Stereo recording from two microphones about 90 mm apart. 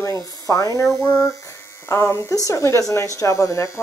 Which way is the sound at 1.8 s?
30° left (ahead or behind).